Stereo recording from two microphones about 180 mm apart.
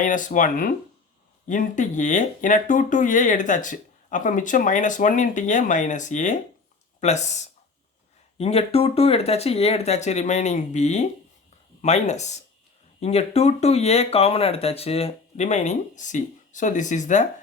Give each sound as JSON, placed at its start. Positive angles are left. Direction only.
{"t": 0.0, "sound": "speech", "side_deg": 45}